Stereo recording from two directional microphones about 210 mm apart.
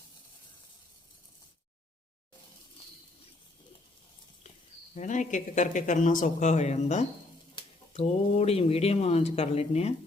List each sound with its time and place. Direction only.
4.9 s speech: 35° left (ahead or behind)